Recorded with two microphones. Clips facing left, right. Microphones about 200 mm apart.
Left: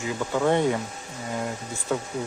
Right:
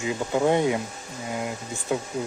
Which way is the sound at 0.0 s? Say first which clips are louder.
Right 1 dB; 20° right (ahead or behind).